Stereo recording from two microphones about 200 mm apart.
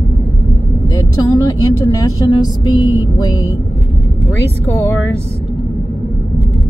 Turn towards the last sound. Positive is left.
turn(degrees=10)  # may be behind; listen again after turning